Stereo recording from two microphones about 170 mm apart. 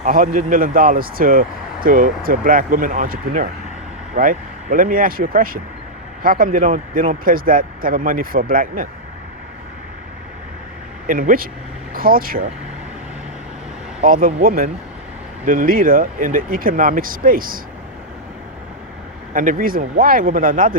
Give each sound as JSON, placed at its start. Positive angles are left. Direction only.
{"t": 0.0, "sound": "speech", "side_deg": -55}
{"t": 11.0, "sound": "speech", "side_deg": -55}
{"t": 14.0, "sound": "speech", "side_deg": -55}
{"t": 19.3, "sound": "speech", "side_deg": -50}